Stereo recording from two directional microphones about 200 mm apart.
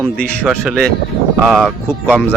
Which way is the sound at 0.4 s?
Centre (ahead or behind).